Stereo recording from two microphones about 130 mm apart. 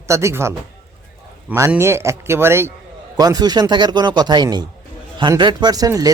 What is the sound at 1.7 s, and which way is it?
A man's voice, 20° right (ahead or behind).